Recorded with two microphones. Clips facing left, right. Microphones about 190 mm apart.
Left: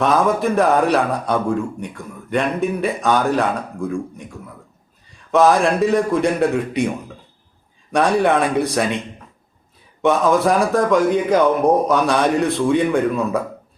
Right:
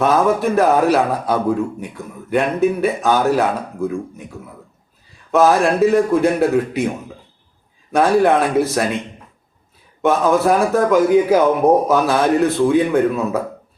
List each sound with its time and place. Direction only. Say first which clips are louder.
0.0 s a man's voice: right 1 dB; centre (ahead or behind)
5.3 s a man's voice: right 1 dB; centre (ahead or behind)
7.9 s a man's voice: right 2 dB; centre (ahead or behind)
10.0 s a man's voice: right 1 dB; centre (ahead or behind)